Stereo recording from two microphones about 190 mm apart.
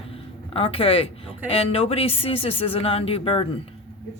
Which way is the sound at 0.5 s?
30° left (ahead or behind).